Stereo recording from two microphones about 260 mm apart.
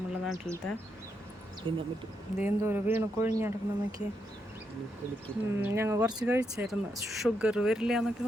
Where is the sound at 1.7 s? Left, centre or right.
Centre.